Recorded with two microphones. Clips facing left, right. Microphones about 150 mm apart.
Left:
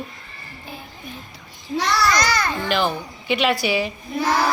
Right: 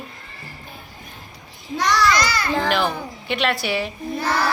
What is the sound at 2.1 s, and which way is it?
Children playing, 45° left (ahead or behind).